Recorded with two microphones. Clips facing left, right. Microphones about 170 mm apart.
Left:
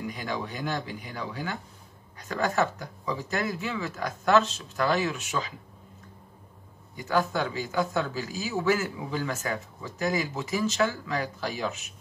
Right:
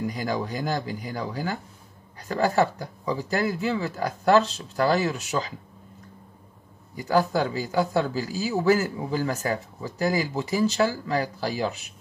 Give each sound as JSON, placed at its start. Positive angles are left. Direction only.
{"t": 0.0, "sound": "speech", "side_deg": -35}
{"t": 7.0, "sound": "speech", "side_deg": -35}